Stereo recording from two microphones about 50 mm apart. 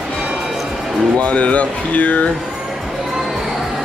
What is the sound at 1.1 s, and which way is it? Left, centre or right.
Speech, left.